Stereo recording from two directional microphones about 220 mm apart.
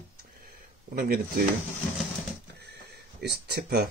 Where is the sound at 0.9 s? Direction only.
45° right (ahead or behind).